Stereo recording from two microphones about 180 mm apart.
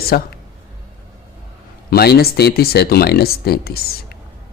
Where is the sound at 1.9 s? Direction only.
60° left (ahead or behind).